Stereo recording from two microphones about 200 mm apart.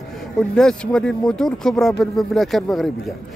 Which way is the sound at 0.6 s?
5° left (ahead or behind).